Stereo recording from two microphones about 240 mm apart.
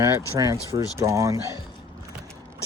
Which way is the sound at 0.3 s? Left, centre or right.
Centre.